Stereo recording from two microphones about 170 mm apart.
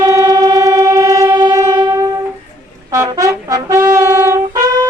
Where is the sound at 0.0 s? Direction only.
20° right (ahead or behind).